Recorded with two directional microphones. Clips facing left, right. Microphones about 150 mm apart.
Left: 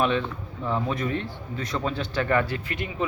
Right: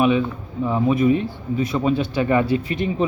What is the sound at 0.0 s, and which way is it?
A man's voice, 10° right (ahead or behind).